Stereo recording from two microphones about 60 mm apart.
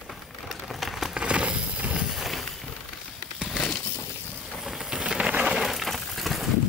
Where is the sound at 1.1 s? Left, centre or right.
Centre.